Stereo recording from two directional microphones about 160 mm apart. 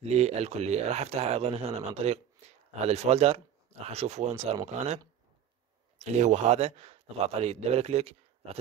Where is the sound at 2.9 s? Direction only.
40° right (ahead or behind).